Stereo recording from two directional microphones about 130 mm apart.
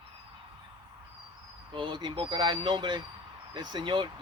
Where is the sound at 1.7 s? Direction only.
35° right (ahead or behind).